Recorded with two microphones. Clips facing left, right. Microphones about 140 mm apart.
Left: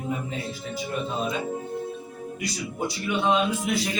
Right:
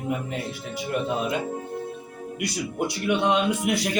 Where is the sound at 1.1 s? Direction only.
65° right (ahead or behind).